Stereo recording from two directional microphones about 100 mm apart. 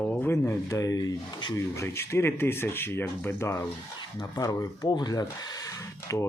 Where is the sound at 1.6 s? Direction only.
25° left (ahead or behind); by 5.2 s 45° left (ahead or behind).